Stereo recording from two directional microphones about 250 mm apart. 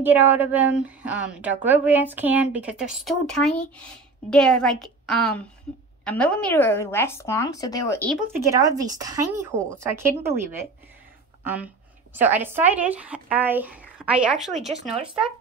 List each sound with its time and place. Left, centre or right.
0.0 s a woman's voice: centre
8.5 s a woman's voice: centre
11.4 s a woman's voice: centre
15.0 s speech: right